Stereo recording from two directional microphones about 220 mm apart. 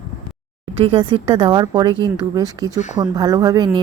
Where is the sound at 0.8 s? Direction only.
25° right (ahead or behind).